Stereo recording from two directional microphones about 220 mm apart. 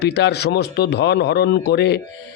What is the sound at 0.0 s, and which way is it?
Speech, 50° left (ahead or behind).